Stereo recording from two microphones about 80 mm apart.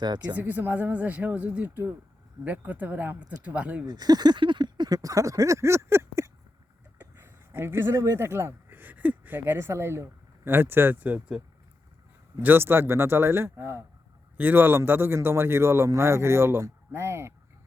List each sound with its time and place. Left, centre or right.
0.0 s speech: right
0.3 s speech: right
3.8 s a sound: right
8.0 s a man's voice: right